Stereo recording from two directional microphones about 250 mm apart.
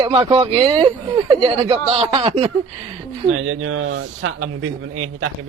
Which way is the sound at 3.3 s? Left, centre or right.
Right.